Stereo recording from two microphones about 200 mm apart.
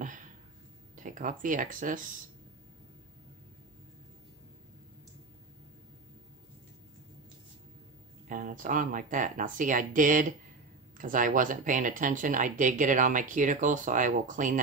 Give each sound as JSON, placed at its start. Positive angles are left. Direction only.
{"t": 0.9, "sound": "speech", "side_deg": -40}
{"t": 8.3, "sound": "speech", "side_deg": -40}